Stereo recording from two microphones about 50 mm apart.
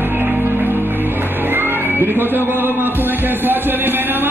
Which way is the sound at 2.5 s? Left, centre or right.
Right.